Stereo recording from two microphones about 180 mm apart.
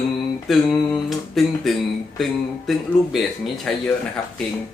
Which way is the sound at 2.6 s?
Centre (ahead or behind).